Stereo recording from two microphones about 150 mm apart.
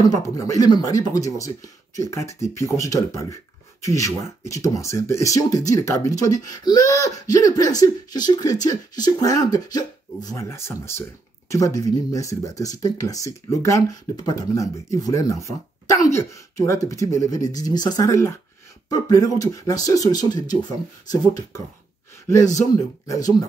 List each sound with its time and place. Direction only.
0.1 s speech: 25° left (ahead or behind)
23.0 s speech: 25° left (ahead or behind)